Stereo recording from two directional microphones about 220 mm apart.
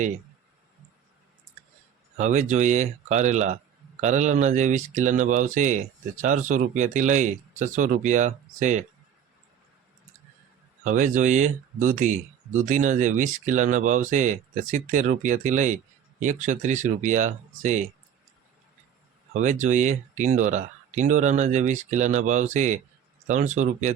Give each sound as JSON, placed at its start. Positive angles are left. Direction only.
{"t": 2.1, "sound": "speech", "side_deg": -30}
{"t": 10.8, "sound": "speech", "side_deg": -35}
{"t": 19.3, "sound": "speech", "side_deg": -35}